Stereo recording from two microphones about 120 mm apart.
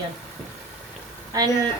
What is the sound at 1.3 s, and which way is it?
Speech, 30° right (ahead or behind).